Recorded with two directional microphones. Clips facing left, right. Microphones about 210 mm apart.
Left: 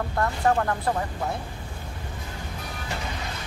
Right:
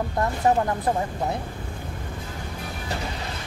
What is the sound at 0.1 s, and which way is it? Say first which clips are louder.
Speech: right 1 dB; 20° right (ahead or behind).